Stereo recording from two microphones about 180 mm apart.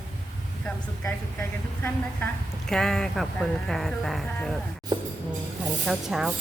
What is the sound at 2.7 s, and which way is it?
A woman's voice, centre (ahead or behind).